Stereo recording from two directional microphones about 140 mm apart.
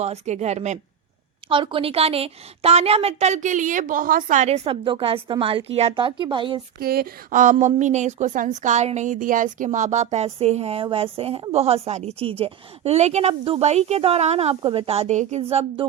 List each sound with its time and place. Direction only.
0.0 s a woman's voice: 50° right (ahead or behind)
1.5 s a woman's voice: 35° right (ahead or behind)
6.7 s speech: 90° right; by 7.5 s 70° right (ahead or behind)
7.6 s a woman's voice: 60° right (ahead or behind); by 15.9 s 40° right (ahead or behind)